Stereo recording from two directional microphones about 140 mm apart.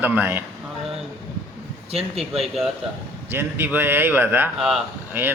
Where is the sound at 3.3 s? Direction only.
15° right (ahead or behind).